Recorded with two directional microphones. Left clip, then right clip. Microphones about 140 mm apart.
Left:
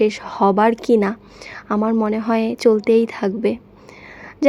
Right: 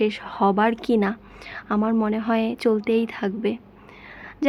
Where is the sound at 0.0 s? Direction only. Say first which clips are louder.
Left 5 dB; 30° left (ahead or behind).